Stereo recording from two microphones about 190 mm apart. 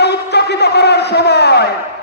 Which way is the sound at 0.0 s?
60° left (ahead or behind).